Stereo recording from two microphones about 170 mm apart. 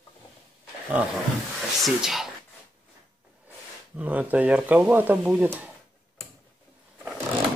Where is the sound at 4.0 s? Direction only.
10° right (ahead or behind).